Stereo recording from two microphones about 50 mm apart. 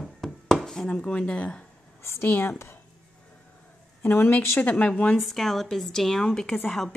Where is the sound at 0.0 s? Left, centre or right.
Centre.